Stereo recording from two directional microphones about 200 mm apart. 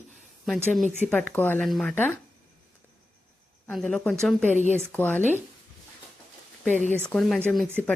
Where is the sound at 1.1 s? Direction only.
5° left (ahead or behind).